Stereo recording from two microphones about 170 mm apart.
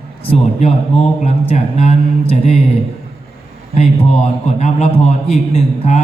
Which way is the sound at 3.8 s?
40° left (ahead or behind).